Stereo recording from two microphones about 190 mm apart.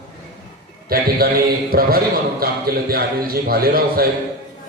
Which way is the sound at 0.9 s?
50° right (ahead or behind).